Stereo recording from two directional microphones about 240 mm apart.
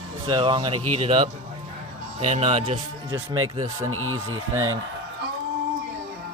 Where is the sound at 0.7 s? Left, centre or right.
Right.